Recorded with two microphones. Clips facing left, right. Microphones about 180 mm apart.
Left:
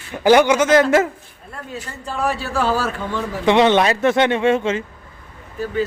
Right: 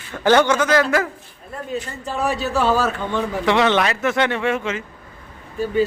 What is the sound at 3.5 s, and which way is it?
Speech, 20° left (ahead or behind).